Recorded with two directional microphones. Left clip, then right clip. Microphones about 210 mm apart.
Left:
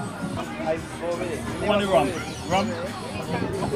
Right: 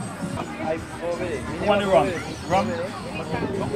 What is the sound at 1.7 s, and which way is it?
Speech, 20° right (ahead or behind).